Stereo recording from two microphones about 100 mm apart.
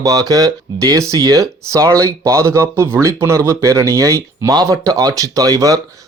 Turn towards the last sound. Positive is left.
turn(degrees=-35)  # may be behind; listen again after turning